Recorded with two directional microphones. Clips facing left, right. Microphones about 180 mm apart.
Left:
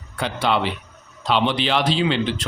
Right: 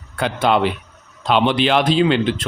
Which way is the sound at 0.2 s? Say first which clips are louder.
Right 5 dB; 50° right (ahead or behind).